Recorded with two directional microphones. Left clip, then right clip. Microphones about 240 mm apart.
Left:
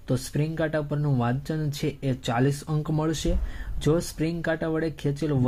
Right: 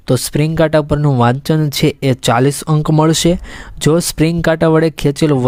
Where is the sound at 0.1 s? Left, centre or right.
Right.